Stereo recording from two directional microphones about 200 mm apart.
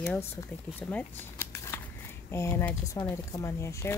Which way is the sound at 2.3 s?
15° left (ahead or behind).